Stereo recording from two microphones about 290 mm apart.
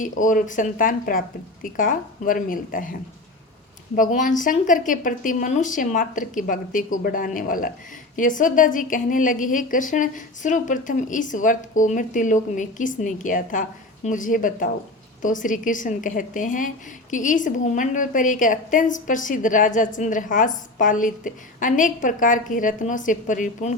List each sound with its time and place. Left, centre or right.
0.0 s a woman's voice: left